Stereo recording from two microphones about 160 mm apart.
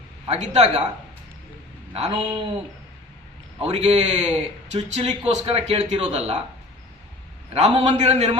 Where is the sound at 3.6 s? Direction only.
40° right (ahead or behind).